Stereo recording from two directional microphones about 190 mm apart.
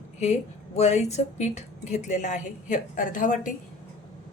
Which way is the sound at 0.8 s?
35° left (ahead or behind).